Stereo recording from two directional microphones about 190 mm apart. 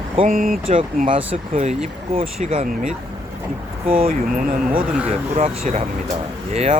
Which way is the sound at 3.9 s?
50° right (ahead or behind).